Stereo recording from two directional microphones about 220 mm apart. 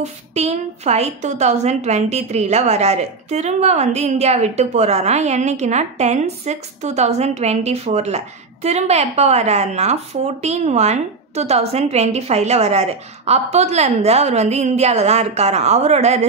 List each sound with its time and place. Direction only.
0.3 s a woman's voice: 30° right (ahead or behind)